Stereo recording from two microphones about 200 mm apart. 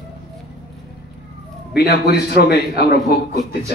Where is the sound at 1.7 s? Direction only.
55° left (ahead or behind).